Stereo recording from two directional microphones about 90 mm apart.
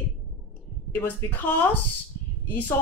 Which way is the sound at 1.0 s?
20° left (ahead or behind).